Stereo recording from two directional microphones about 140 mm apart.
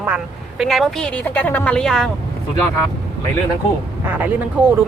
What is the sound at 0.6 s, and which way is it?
Speech, centre (ahead or behind).